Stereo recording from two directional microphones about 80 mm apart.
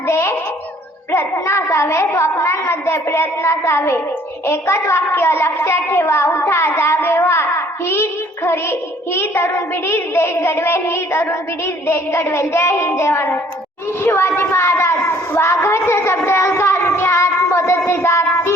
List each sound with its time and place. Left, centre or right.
0.1 s music: left
1.1 s a child's voice: left
15.4 s child singing: left